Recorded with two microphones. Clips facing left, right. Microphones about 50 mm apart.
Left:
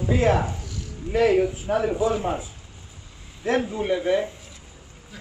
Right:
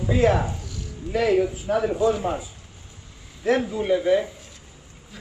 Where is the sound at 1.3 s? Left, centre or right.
Centre.